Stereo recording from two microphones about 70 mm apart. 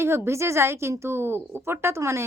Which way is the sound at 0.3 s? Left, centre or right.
Right.